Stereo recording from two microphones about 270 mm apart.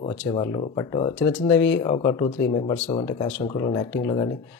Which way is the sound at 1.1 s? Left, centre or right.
Centre.